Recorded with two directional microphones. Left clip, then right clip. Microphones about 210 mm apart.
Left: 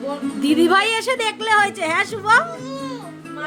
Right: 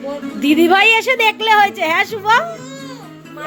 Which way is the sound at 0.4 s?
5° right (ahead or behind).